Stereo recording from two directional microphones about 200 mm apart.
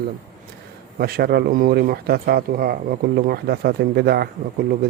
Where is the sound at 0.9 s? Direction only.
50° right (ahead or behind).